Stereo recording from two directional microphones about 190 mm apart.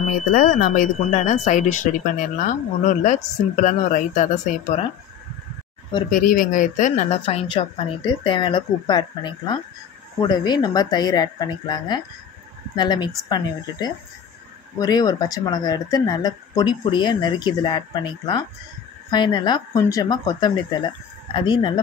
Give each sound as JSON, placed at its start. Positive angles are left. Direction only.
{"t": 0.3, "sound": "speech", "side_deg": 45}
{"t": 6.0, "sound": "speech", "side_deg": 45}